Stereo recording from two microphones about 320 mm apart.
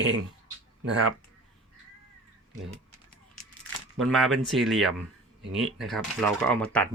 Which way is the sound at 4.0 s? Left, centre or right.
Centre.